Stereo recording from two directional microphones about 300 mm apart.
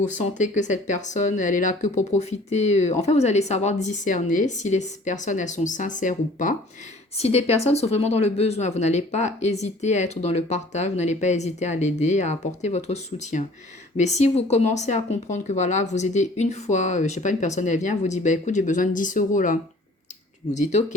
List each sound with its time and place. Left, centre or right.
0.0 s speech: left